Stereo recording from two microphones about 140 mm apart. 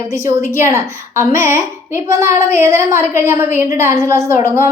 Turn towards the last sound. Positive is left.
turn(degrees=-20)  # may be behind; listen again after turning